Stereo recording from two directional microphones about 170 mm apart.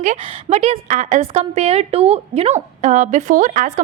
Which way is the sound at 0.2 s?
35° right (ahead or behind).